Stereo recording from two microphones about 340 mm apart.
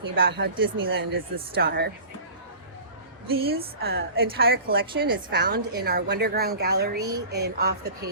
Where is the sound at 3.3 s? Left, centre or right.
Right.